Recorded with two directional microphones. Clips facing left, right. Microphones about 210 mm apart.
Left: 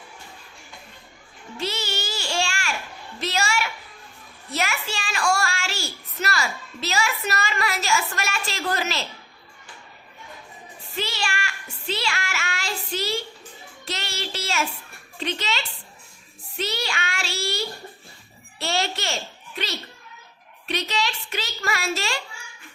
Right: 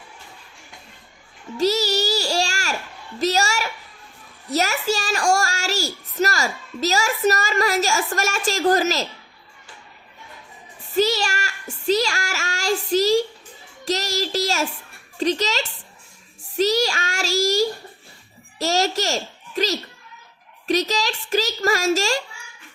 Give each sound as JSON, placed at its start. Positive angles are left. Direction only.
{"t": 1.5, "sound": "child singing", "side_deg": -40}
{"t": 3.2, "sound": "a woman's voice", "side_deg": -40}
{"t": 10.9, "sound": "child singing", "side_deg": -40}
{"t": 13.8, "sound": "a sound", "side_deg": -40}
{"t": 15.2, "sound": "a woman's voice", "side_deg": -40}